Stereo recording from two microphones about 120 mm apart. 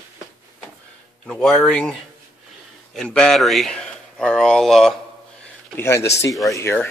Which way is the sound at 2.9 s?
5° left (ahead or behind).